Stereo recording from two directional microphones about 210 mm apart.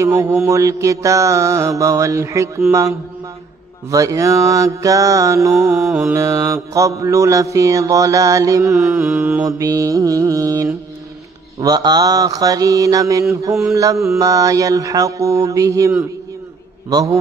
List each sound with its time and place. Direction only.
0.0 s mantra: 15° right (ahead or behind)
6.1 s mantra: 15° right (ahead or behind)
8.9 s mantra: 5° right (ahead or behind)
9.4 s mantra: 15° right (ahead or behind)
16.9 s mantra: 15° right (ahead or behind)